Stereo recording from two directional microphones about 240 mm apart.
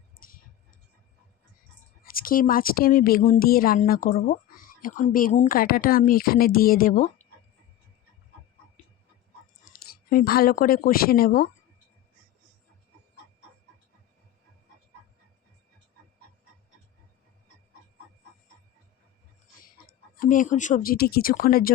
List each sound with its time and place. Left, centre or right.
0.2 s a sound: left
2.0 s speech: left
9.7 s speech: left
20.1 s speech: left